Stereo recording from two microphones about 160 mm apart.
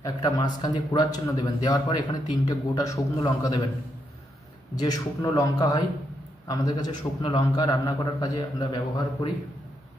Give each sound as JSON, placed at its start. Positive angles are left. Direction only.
{"t": 0.0, "sound": "a man's voice", "side_deg": 20}
{"t": 4.7, "sound": "a man's voice", "side_deg": 25}